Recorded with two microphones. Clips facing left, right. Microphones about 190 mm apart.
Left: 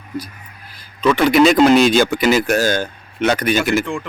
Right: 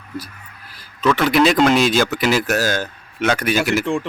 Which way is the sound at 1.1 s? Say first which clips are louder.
Left 3 dB; centre (ahead or behind).